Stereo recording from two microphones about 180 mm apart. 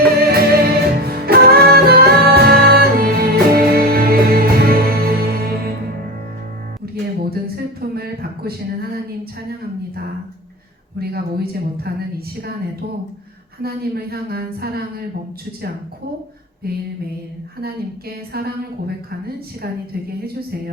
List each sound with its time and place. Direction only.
0.2 s music: 55° right (ahead or behind)
6.9 s a sound: 60° right (ahead or behind)
10.9 s a woman's voice: 60° right (ahead or behind)
13.6 s a woman's voice: 60° right (ahead or behind)
16.6 s a woman's voice: 60° right (ahead or behind)
18.3 s a woman's voice: 60° right (ahead or behind)
19.6 s a woman's voice: 60° right (ahead or behind)